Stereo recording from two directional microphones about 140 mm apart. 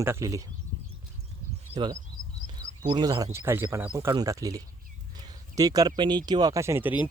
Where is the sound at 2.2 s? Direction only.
60° right (ahead or behind).